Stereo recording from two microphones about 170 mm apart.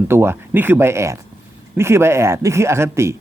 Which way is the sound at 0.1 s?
15° right (ahead or behind).